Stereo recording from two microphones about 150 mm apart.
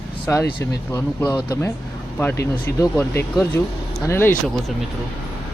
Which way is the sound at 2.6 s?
15° left (ahead or behind).